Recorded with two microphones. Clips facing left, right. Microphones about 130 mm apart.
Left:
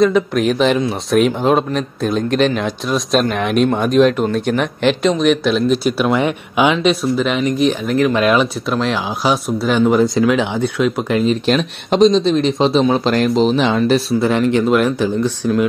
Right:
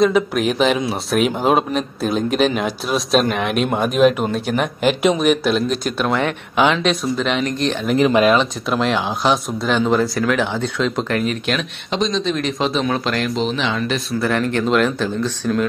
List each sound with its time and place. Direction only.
0.0 s speech: 5° right (ahead or behind)
9.9 s speech: 20° left (ahead or behind)
11.2 s speech: 35° left (ahead or behind)
13.1 s speech: 40° left (ahead or behind)
14.2 s speech: 15° left (ahead or behind)